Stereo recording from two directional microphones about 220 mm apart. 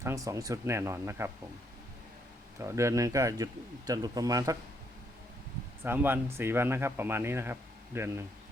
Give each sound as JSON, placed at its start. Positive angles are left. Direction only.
{"t": 0.0, "sound": "speech", "side_deg": -15}
{"t": 2.6, "sound": "speech", "side_deg": -15}
{"t": 5.8, "sound": "speech", "side_deg": -10}